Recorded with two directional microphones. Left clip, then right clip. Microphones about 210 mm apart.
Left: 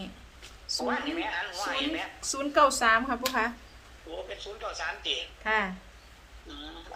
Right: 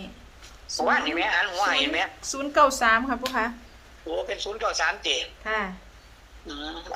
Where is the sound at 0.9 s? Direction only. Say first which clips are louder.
Right 9 dB; 50° right (ahead or behind).